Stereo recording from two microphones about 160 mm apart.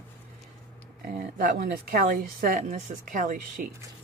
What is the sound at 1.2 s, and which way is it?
A woman's voice, 65° right (ahead or behind).